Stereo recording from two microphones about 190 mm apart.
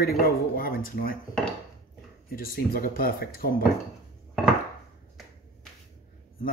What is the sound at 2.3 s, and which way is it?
Speech, 50° left (ahead or behind).